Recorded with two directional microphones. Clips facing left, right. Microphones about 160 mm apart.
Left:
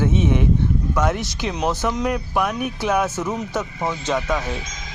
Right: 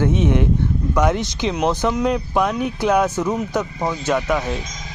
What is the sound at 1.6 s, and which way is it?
Speech, 10° right (ahead or behind).